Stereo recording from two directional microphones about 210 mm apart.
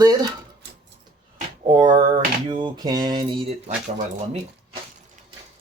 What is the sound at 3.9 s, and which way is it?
Speech, 30° right (ahead or behind).